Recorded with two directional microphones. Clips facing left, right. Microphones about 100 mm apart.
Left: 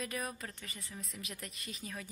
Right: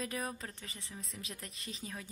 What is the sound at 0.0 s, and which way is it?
Speech, 25° right (ahead or behind).